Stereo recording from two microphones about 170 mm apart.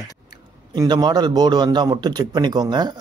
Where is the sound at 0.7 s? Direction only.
25° right (ahead or behind).